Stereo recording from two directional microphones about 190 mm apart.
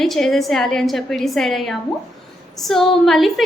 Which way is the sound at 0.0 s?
Centre (ahead or behind).